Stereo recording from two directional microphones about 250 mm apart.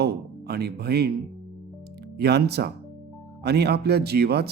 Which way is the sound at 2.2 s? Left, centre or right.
Right.